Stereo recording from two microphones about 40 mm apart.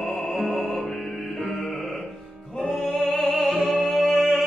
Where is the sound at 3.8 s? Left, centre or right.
Centre.